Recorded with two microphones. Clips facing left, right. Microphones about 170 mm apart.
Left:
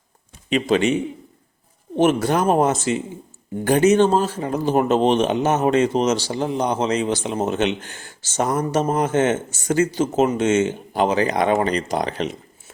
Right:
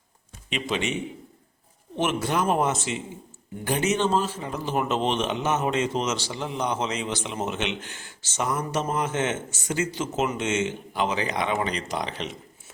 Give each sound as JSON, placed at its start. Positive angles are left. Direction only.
{"t": 0.5, "sound": "speech", "side_deg": 40}
{"t": 2.2, "sound": "speech", "side_deg": 40}